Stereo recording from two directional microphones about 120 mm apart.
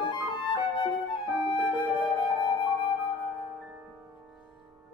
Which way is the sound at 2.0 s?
45° left (ahead or behind).